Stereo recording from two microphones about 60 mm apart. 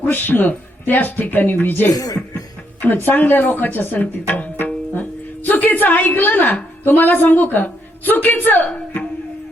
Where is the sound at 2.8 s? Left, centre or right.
Left.